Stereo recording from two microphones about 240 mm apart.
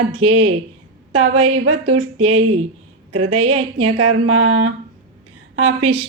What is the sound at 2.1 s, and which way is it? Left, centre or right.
A woman's voice, right.